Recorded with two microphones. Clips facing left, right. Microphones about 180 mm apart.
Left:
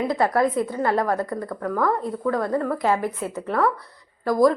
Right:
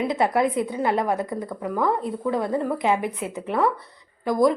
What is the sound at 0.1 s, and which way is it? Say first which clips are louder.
A woman's voice: left 1 dB; 20° right (ahead or behind).